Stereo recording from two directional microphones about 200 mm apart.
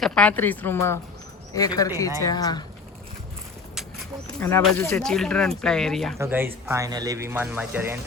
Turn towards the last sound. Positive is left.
turn(degrees=-10)  # may be behind; listen again after turning